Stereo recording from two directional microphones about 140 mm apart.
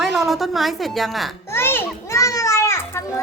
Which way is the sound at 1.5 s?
15° left (ahead or behind).